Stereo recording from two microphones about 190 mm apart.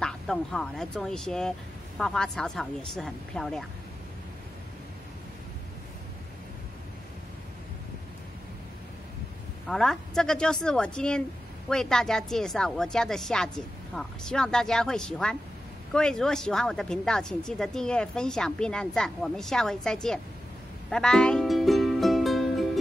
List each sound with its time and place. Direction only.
0.0 s speech: 5° left (ahead or behind)
9.7 s speech: centre (ahead or behind)
20.9 s music: 5° left (ahead or behind)